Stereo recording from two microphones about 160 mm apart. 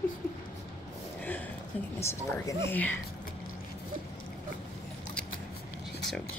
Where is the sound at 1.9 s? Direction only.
15° left (ahead or behind).